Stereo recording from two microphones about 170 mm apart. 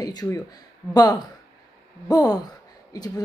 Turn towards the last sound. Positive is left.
turn(degrees=20)  # may be behind; listen again after turning